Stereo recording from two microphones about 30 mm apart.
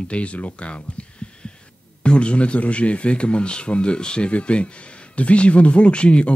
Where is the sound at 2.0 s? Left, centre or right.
Left.